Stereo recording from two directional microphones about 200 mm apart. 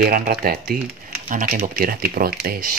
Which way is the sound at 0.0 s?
45° right (ahead or behind).